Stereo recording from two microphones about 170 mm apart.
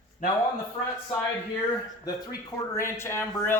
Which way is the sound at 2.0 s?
20° left (ahead or behind).